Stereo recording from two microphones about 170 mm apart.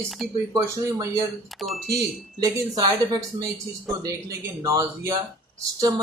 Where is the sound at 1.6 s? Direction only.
Centre (ahead or behind).